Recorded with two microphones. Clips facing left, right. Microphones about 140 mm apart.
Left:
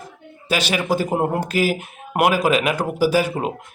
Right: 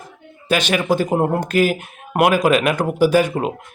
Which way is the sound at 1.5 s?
50° right (ahead or behind).